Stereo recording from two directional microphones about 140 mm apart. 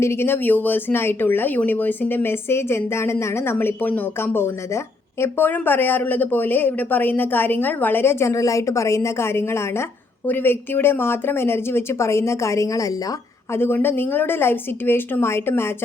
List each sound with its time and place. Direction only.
0.0 s speech: 20° left (ahead or behind)